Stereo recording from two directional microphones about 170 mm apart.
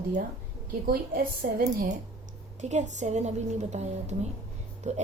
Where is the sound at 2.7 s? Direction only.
45° right (ahead or behind).